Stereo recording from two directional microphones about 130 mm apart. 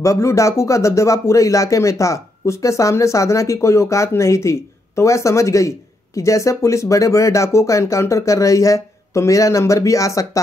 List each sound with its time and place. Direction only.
0.0 s speech: 25° left (ahead or behind)